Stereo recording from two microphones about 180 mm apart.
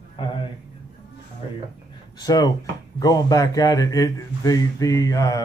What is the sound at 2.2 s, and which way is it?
Speech, 20° left (ahead or behind).